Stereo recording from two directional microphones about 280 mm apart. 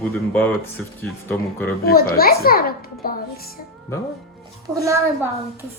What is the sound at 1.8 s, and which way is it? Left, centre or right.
A child's voice, left.